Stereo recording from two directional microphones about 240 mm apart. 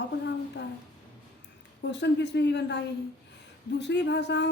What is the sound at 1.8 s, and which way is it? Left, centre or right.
Speech, left.